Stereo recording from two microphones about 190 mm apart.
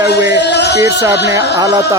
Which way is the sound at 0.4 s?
60° left (ahead or behind).